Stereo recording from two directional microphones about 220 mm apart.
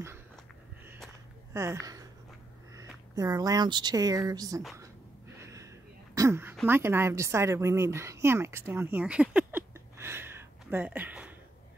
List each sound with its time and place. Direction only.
1.5 s speech: 10° right (ahead or behind)
3.2 s speech: 15° right (ahead or behind)
5.4 s a sound: 15° right (ahead or behind)
6.1 s a woman's voice: 10° right (ahead or behind)